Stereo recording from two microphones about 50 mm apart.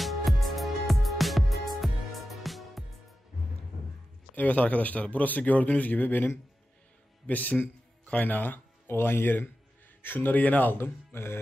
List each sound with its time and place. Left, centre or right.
0.0 s music: centre
4.4 s a man's voice: left
8.0 s a sound: left
8.9 s a man's voice: left
10.7 s speech: left